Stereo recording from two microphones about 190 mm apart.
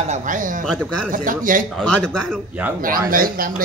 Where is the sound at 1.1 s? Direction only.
45° right (ahead or behind).